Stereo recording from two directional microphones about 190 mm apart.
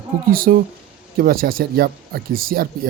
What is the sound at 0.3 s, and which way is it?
Speech, 50° right (ahead or behind).